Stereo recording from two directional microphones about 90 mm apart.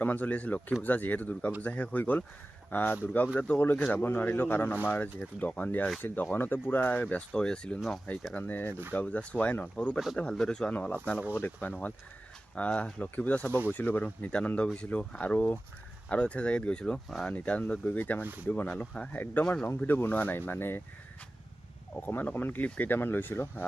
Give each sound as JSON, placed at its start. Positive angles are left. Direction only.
{"t": 0.0, "sound": "speech", "side_deg": 20}
{"t": 22.0, "sound": "speech", "side_deg": 20}